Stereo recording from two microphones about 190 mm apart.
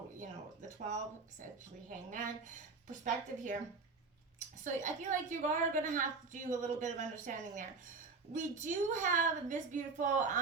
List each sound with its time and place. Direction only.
2.0 s a woman's voice: 40° right (ahead or behind)